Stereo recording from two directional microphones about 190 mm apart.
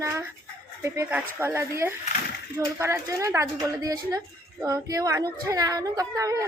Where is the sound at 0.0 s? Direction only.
15° right (ahead or behind).